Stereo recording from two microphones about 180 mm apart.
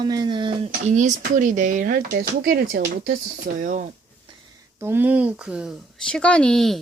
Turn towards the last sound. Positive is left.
turn(degrees=0)  # may be behind; listen again after turning